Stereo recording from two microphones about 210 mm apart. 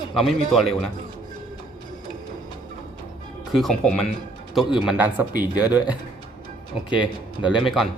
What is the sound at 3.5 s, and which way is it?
A man's voice, centre (ahead or behind).